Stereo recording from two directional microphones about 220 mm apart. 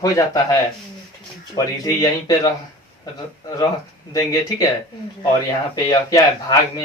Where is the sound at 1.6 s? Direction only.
15° left (ahead or behind).